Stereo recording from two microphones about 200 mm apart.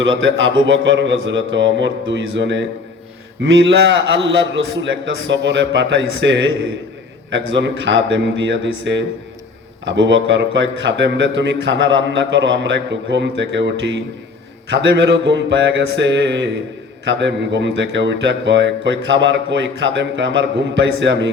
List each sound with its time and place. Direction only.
0.0 s a man's voice: 65° right (ahead or behind)